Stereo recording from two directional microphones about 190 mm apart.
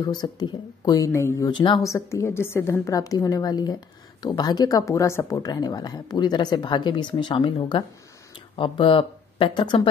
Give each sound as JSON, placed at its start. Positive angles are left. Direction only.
{"t": 0.0, "sound": "speech", "side_deg": 20}